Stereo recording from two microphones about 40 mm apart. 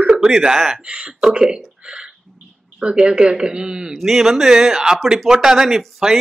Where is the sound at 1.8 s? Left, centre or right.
Right.